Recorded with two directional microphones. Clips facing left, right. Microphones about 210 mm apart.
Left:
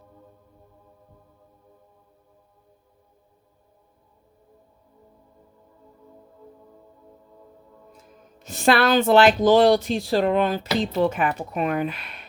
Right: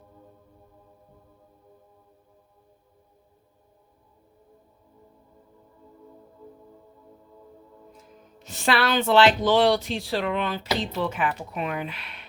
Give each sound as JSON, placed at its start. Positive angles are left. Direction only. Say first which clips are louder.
{"t": 8.4, "sound": "speech", "louder": "left 5 dB", "side_deg": 45}